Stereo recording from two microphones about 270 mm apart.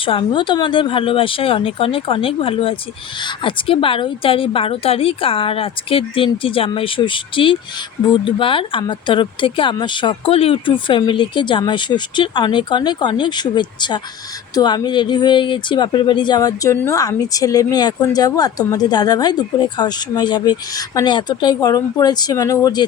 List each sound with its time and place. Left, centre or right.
0.0 s a woman's voice: centre